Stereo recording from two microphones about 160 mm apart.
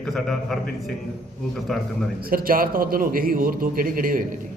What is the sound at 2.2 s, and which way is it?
A man's voice, 65° right (ahead or behind).